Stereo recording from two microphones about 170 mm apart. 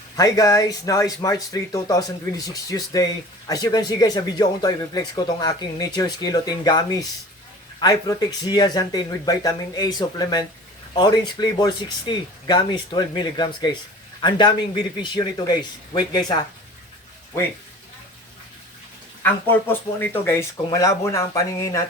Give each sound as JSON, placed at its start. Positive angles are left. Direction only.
{"t": 0.2, "sound": "speech", "side_deg": 20}
{"t": 19.2, "sound": "speech", "side_deg": 10}